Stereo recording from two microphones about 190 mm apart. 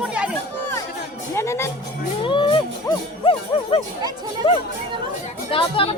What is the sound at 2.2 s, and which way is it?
Music, 25° left (ahead or behind).